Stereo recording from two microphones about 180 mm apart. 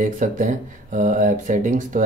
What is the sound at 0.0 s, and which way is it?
Speech, 45° right (ahead or behind).